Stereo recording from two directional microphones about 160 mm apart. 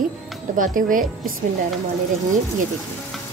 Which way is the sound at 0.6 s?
55° right (ahead or behind).